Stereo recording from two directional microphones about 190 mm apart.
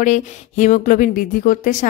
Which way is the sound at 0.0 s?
40° left (ahead or behind).